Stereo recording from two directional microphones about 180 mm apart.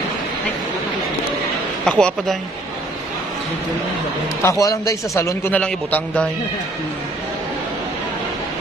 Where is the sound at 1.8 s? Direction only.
5° left (ahead or behind).